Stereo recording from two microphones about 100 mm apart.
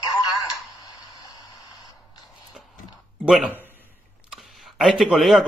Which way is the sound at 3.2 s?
10° right (ahead or behind).